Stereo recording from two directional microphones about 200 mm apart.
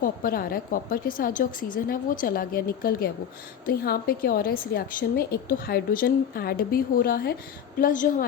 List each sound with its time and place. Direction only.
0.0 s a woman's voice: 45° left (ahead or behind)